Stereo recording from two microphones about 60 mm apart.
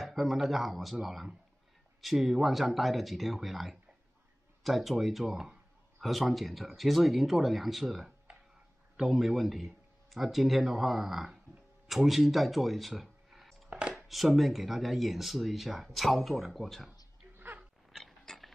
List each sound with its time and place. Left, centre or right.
0.0 s speech: centre
13.7 s dishes: centre
13.9 s speech: centre
17.9 s mechanisms: centre